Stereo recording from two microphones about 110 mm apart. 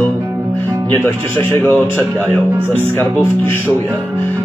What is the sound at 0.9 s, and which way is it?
Speech, 20° left (ahead or behind).